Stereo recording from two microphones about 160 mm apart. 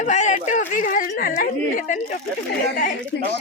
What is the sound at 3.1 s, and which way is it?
Speech, 90° left.